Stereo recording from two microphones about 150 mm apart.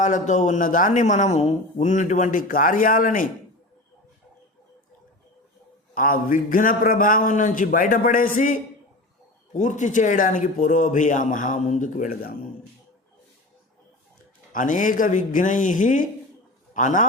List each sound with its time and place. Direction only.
0.0 s speech: 55° left (ahead or behind)
5.9 s speech: 65° left (ahead or behind)
14.5 s speech: 60° left (ahead or behind)